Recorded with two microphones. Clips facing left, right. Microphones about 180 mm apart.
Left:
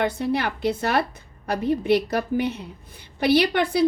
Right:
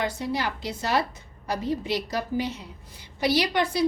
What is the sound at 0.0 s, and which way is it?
A woman's voice, 60° left (ahead or behind).